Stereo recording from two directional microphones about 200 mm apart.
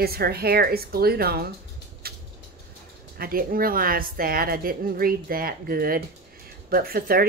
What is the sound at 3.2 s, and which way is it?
Speech, 45° right (ahead or behind).